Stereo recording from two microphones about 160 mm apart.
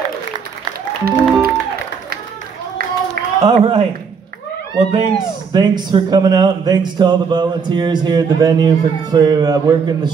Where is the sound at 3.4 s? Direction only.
35° right (ahead or behind).